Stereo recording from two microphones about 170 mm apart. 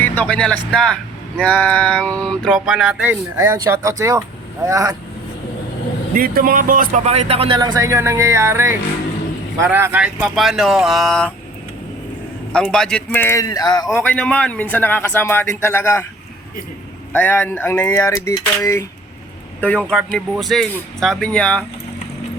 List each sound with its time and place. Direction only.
0.0 s speech: 10° left (ahead or behind)
2.6 s speech: 5° right (ahead or behind)
6.1 s speech: 55° right (ahead or behind); by 11.3 s 5° left (ahead or behind)
12.5 s speech: 5° left (ahead or behind); by 13.8 s 20° left (ahead or behind)
13.8 s speech: 5° left (ahead or behind)
17.1 s speech: 10° left (ahead or behind)
19.9 s speech: centre (ahead or behind)